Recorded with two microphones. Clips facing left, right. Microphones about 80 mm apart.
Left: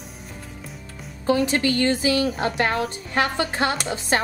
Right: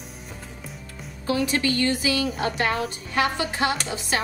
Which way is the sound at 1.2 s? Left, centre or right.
Left.